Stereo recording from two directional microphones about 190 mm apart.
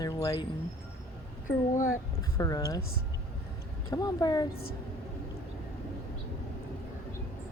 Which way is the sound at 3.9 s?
20° left (ahead or behind).